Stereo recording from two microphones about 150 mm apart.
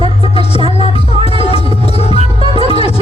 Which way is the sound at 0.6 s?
40° right (ahead or behind).